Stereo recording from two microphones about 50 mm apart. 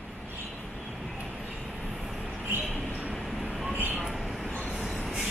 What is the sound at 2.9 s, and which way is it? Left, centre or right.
Vehicle, right.